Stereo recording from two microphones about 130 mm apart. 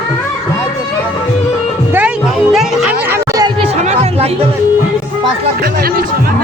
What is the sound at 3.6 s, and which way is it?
Music, 50° right (ahead or behind).